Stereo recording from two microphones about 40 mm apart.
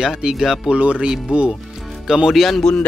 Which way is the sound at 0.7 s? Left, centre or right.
Right.